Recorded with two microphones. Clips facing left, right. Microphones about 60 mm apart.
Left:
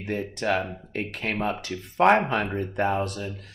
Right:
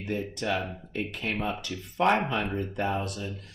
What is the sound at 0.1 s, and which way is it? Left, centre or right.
Speech, left.